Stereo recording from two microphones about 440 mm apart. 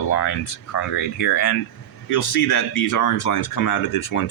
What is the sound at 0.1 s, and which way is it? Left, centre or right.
Speech, left.